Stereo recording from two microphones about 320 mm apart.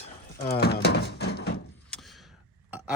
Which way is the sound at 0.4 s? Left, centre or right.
Left.